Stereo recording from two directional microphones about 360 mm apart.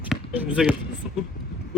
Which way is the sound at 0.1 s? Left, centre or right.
Centre.